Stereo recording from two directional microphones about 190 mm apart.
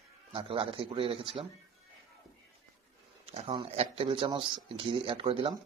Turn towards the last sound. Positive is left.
turn(degrees=-30)  # may be behind; listen again after turning